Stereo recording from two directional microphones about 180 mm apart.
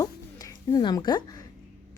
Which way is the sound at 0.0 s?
20° left (ahead or behind).